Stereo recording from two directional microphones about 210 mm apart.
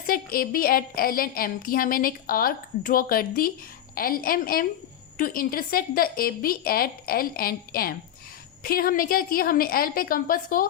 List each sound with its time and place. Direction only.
0.1 s a woman's voice: 45° left (ahead or behind)